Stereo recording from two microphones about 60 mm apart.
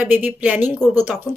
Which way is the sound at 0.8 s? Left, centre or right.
Centre.